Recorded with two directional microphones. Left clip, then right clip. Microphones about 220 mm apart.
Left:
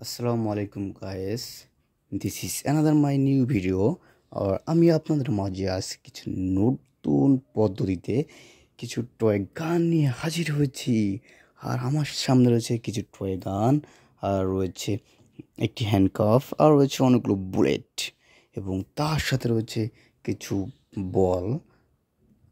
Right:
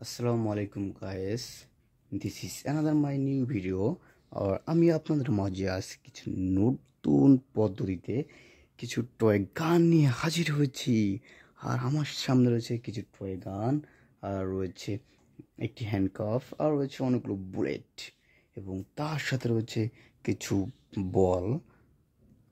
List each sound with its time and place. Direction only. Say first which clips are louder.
0.0 s speech: left 3 dB; 15° left (ahead or behind)
2.1 s speech: left 6 dB; 30° left (ahead or behind); by 7.6 s centre (ahead or behind)
7.6 s speech: left 5 dB; 15° left (ahead or behind)